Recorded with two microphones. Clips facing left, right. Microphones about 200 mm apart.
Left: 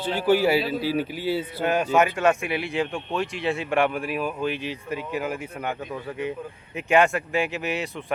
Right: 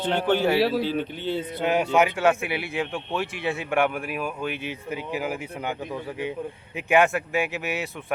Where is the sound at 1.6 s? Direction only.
10° right (ahead or behind).